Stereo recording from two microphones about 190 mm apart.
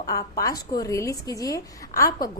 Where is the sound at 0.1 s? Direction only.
15° left (ahead or behind).